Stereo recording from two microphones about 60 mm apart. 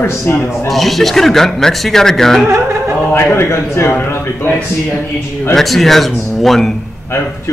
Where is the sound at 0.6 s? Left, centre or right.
Centre.